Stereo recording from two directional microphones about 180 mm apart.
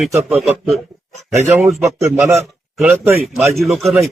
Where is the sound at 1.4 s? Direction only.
15° right (ahead or behind).